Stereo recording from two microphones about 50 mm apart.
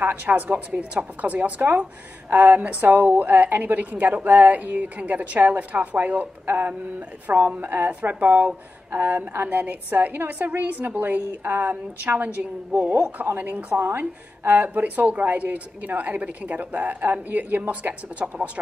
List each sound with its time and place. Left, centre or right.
0.0 s speech: right
6.4 s male singing: right
7.2 s speech: right
11.7 s a woman's voice: right
13.7 s speech: right